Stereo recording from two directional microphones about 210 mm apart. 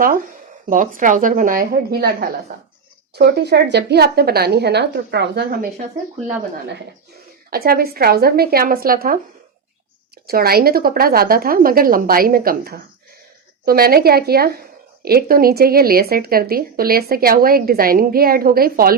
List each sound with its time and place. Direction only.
0.0 s a woman's voice: 40° right (ahead or behind)
7.5 s speech: 45° right (ahead or behind)
10.2 s speech: 45° right (ahead or behind)